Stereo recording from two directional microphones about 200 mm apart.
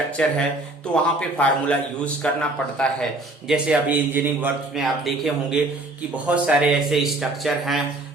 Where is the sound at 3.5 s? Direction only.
5° right (ahead or behind).